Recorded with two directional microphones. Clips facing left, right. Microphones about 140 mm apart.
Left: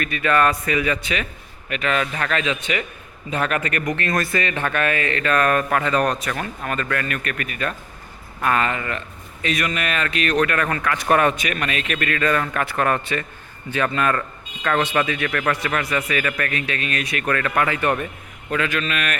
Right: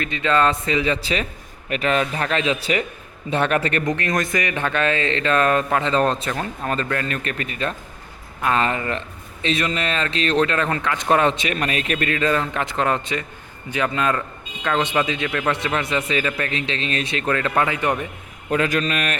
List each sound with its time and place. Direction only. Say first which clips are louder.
0.0 s a man's voice: even; 20° right (ahead or behind)
3.9 s a man's voice: even; 20° right (ahead or behind)
8.6 s a man's voice: right 2 dB; 30° right (ahead or behind)
18.5 s speech: right 3 dB; 35° right (ahead or behind)